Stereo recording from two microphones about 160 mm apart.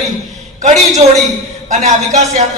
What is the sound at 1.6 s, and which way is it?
Speech, 50° right (ahead or behind).